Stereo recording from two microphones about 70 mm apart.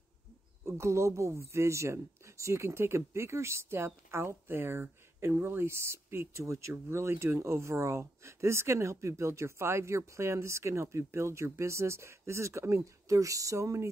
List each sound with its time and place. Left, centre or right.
0.7 s speech: right